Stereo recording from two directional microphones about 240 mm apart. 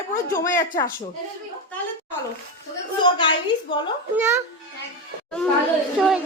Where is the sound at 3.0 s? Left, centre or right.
Centre.